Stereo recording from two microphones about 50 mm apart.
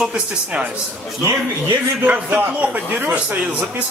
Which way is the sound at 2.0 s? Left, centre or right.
Right.